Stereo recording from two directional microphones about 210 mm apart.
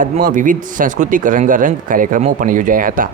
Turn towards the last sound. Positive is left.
turn(degrees=-40)  # may be behind; listen again after turning